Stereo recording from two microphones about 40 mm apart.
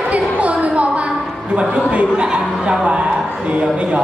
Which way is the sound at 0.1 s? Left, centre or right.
Right.